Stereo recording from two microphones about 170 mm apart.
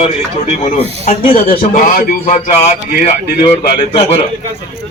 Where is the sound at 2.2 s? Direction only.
40° left (ahead or behind).